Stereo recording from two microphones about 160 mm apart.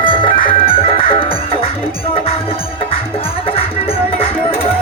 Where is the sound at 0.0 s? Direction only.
30° left (ahead or behind).